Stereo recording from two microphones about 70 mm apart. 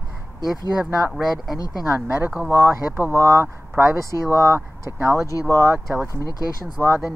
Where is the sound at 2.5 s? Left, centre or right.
Right.